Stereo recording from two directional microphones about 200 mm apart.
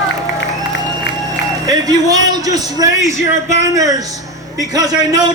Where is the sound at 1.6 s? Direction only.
20° right (ahead or behind).